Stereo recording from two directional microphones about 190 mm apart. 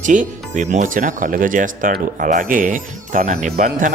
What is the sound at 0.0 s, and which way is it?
Speech, 40° right (ahead or behind).